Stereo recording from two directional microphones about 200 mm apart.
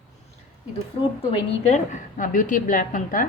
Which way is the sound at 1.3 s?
35° left (ahead or behind).